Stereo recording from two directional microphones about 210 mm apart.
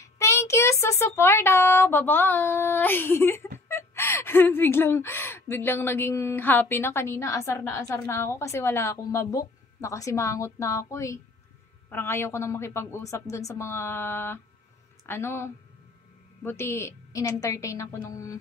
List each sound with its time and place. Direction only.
0.0 s speech: 15° left (ahead or behind)